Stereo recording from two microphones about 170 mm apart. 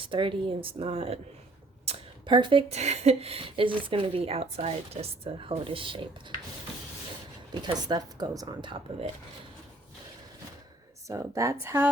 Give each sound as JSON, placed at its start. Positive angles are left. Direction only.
{"t": 0.0, "sound": "speech", "side_deg": -30}
{"t": 7.5, "sound": "speech", "side_deg": -25}
{"t": 11.1, "sound": "a woman's voice", "side_deg": -20}